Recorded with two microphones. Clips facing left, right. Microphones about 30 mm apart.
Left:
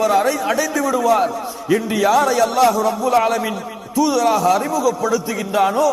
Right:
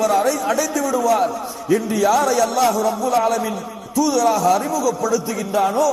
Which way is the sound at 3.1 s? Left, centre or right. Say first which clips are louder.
Left 3 dB; left.